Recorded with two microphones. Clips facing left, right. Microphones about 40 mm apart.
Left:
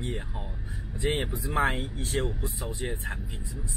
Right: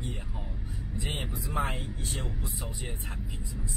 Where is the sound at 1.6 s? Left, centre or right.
Left.